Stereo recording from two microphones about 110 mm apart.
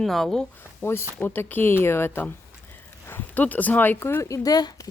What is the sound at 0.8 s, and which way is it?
Speech, 20° left (ahead or behind).